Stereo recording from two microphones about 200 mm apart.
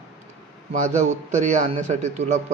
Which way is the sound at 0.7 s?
35° right (ahead or behind).